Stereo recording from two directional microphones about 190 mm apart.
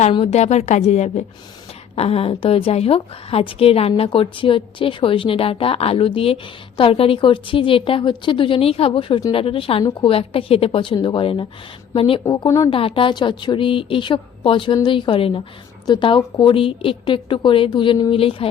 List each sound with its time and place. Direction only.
0.0 s a woman's voice: 30° left (ahead or behind)
12.7 s a woman's voice: 30° left (ahead or behind)